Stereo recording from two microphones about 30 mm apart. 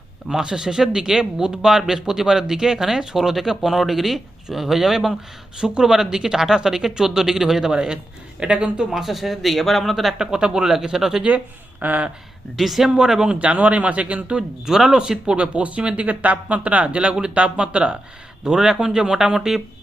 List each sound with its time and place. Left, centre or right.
0.3 s speech: right
5.5 s speech: right
8.4 s speech: right
8.9 s speech: centre
10.2 s speech: right
10.9 s speech: centre
11.8 s speech: right
12.5 s speech: centre
13.4 s speech: right
14.7 s speech: right
15.4 s speech: right
18.4 s speech: right